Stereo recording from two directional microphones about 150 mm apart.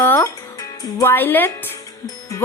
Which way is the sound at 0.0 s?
15° left (ahead or behind).